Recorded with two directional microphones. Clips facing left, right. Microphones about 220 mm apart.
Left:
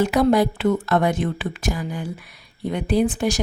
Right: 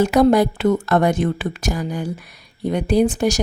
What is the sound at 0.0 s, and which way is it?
Speech, 45° right (ahead or behind).